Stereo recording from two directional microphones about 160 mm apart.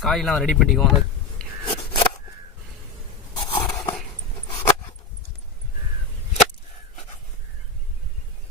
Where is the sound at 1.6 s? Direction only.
35° left (ahead or behind).